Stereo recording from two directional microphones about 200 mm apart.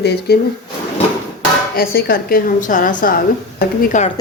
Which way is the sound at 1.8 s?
50° left (ahead or behind).